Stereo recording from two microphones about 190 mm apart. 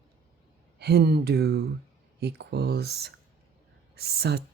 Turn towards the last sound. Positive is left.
turn(degrees=-60)  # may be behind; listen again after turning